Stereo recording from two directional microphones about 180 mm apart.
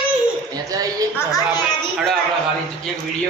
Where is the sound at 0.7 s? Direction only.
20° right (ahead or behind).